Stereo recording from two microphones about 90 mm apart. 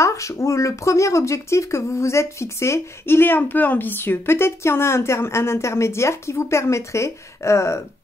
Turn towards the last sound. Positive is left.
turn(degrees=30)  # may be behind; listen again after turning